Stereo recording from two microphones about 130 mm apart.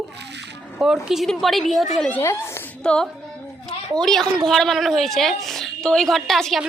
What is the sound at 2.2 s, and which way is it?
Speech, 20° left (ahead or behind).